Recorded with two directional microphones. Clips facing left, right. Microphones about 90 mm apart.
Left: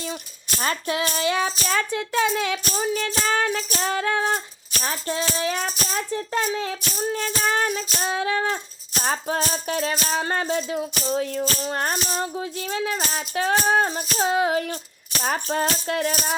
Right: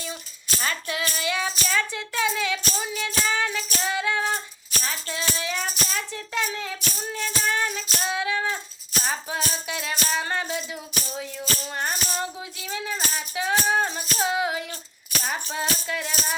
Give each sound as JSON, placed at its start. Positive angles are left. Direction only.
{"t": 0.6, "sound": "music", "side_deg": 35}
{"t": 2.7, "sound": "music", "side_deg": 40}
{"t": 12.0, "sound": "music", "side_deg": 35}